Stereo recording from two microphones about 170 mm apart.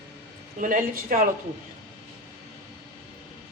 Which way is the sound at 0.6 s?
50° right (ahead or behind).